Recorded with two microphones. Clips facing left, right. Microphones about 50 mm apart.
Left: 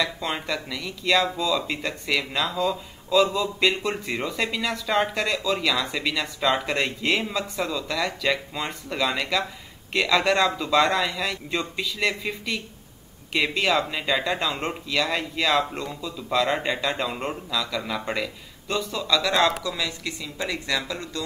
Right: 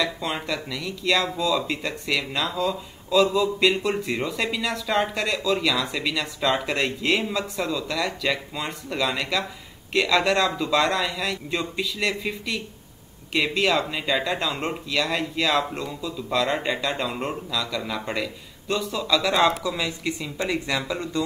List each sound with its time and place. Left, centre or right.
0.0 s speech: centre
19.6 s speech: centre